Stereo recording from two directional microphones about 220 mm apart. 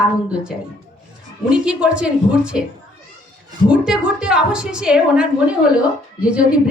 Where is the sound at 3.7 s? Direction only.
5° right (ahead or behind).